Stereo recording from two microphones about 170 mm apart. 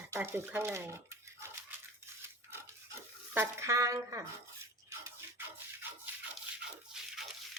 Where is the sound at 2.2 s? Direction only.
15° right (ahead or behind).